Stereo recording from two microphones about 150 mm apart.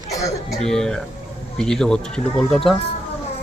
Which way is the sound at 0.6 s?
5° left (ahead or behind).